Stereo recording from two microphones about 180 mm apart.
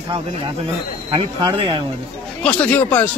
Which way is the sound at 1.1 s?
30° right (ahead or behind).